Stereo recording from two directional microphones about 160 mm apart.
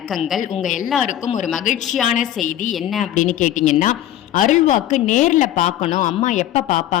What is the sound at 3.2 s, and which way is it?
Speech, 50° left (ahead or behind).